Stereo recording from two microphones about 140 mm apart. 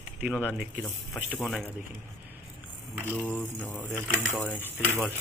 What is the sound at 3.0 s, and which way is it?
Speech, 10° left (ahead or behind).